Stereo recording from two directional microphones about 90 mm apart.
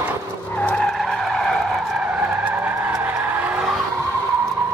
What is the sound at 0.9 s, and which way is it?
Vehicle, centre (ahead or behind).